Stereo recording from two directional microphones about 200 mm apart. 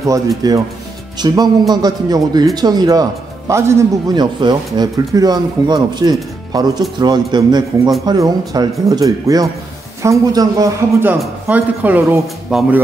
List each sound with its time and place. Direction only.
0.4 s a man's voice: 20° right (ahead or behind)